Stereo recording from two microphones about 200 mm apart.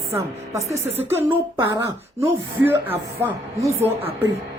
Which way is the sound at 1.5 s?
15° right (ahead or behind).